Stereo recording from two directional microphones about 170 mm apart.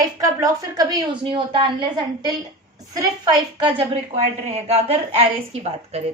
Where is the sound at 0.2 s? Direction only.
20° right (ahead or behind).